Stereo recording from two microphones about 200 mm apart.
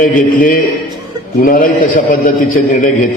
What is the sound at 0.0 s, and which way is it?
A man's voice, 40° left (ahead or behind).